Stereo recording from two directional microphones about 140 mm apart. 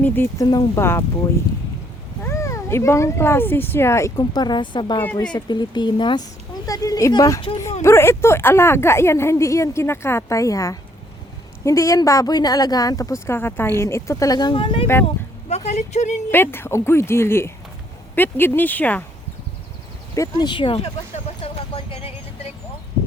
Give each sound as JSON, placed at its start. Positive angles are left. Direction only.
{"t": 0.0, "sound": "speech", "side_deg": 15}
{"t": 2.2, "sound": "speech", "side_deg": 20}
{"t": 15.4, "sound": "speech", "side_deg": 50}
{"t": 16.3, "sound": "speech", "side_deg": 15}
{"t": 20.1, "sound": "speech", "side_deg": 25}
{"t": 20.5, "sound": "speech", "side_deg": 35}
{"t": 21.4, "sound": "vehicle", "side_deg": 40}